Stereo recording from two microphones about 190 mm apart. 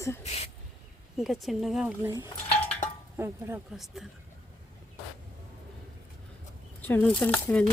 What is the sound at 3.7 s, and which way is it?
Speech, centre (ahead or behind).